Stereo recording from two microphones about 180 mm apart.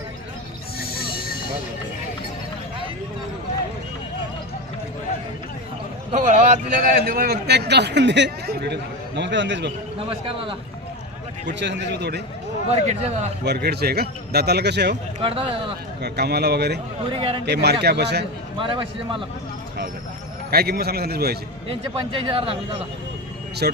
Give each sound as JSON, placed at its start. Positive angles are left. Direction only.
{"t": 6.1, "sound": "speech", "side_deg": -40}
{"t": 7.0, "sound": "speech", "side_deg": -55}
{"t": 10.1, "sound": "a man's voice", "side_deg": -30}
{"t": 11.6, "sound": "speech", "side_deg": -75}
{"t": 12.7, "sound": "speech", "side_deg": -35}
{"t": 13.4, "sound": "a man's voice", "side_deg": -65}
{"t": 15.2, "sound": "speech", "side_deg": -30}
{"t": 16.0, "sound": "a man's voice", "side_deg": -65}
{"t": 17.1, "sound": "a man's voice", "side_deg": -30}
{"t": 17.4, "sound": "speech", "side_deg": -70}
{"t": 18.6, "sound": "a man's voice", "side_deg": -30}
{"t": 20.5, "sound": "a man's voice", "side_deg": -60}
{"t": 21.7, "sound": "speech", "side_deg": -30}
{"t": 23.6, "sound": "a man's voice", "side_deg": -60}